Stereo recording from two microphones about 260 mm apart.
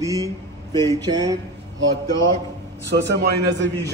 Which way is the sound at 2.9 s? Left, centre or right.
Right.